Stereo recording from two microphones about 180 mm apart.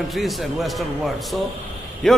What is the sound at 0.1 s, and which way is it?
A man's voice, centre (ahead or behind).